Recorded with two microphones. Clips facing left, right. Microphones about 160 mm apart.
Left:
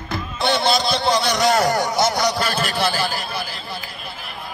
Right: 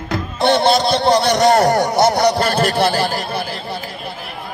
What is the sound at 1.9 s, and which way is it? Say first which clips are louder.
Speech: right 6 dB; 60° right (ahead or behind).